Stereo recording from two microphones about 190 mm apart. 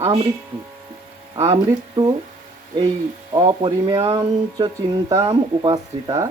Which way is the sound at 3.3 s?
25° right (ahead or behind).